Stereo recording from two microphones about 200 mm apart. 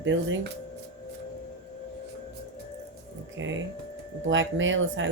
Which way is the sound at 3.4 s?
70° right (ahead or behind).